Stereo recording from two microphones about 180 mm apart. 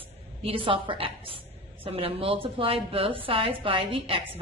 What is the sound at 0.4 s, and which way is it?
A woman's voice, 30° right (ahead or behind).